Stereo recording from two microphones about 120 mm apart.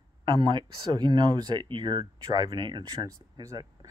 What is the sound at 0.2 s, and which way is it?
Speech, 40° right (ahead or behind).